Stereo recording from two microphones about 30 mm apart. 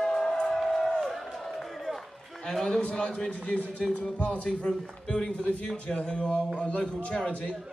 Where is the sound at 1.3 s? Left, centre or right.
Centre.